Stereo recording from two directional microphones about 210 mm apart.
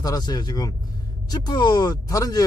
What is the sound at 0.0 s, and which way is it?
Speech, 20° left (ahead or behind).